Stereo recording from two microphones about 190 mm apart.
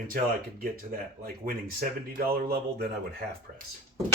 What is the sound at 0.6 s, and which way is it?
Speech, 50° right (ahead or behind).